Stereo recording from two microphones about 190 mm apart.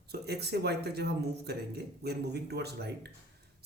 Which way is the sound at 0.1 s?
60° right (ahead or behind).